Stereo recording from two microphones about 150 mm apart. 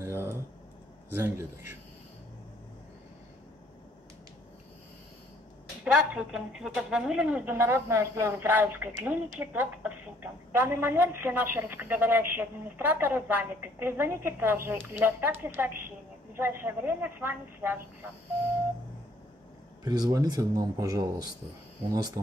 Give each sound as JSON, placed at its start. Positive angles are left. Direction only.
{"t": 0.0, "sound": "typing", "side_deg": -15}
{"t": 1.1, "sound": "a woman's voice", "side_deg": -15}
{"t": 5.9, "sound": "a woman's voice", "side_deg": -5}
{"t": 19.8, "sound": "speech", "side_deg": -25}